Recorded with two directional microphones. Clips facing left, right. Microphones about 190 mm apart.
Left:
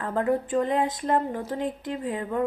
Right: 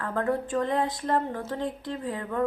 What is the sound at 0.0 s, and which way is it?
A woman's voice, 20° left (ahead or behind).